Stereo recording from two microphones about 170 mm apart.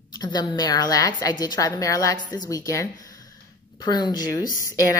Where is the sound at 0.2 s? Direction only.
25° left (ahead or behind).